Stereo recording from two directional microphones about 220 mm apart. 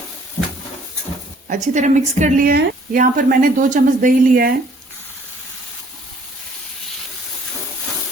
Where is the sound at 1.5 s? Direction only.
35° right (ahead or behind).